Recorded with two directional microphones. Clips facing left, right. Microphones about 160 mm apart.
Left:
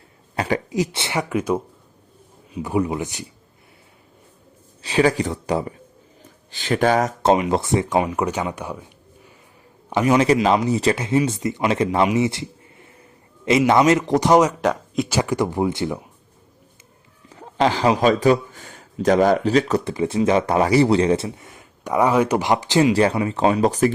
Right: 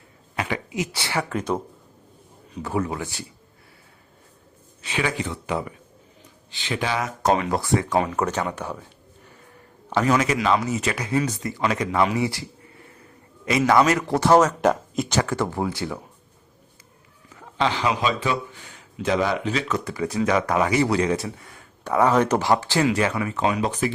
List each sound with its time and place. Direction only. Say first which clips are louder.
0.3 s speech: left 5 dB; 35° left (ahead or behind)
0.9 s speech: left 3 dB; 20° left (ahead or behind)
4.8 s speech: left 8 dB; 35° left (ahead or behind)
6.5 s speech: left 8 dB; 45° left (ahead or behind)
7.2 s speech: left 4 dB; 25° left (ahead or behind)
10.2 s speech: left 5 dB; 30° left (ahead or behind); by 14.5 s 15° left (ahead or behind)
14.6 s speech: even; centre (ahead or behind)
15.2 s speech: left 4 dB; 15° left (ahead or behind)
17.4 s a man's voice: left 5 dB; 40° left (ahead or behind)
19.9 s speech: left 2 dB; 25° left (ahead or behind)